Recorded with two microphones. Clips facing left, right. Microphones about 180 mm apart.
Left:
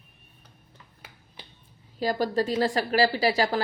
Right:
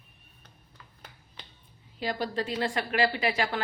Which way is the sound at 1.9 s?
40° left (ahead or behind).